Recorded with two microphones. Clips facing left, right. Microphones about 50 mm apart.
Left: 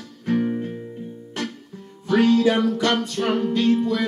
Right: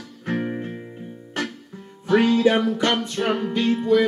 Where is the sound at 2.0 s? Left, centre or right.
Right.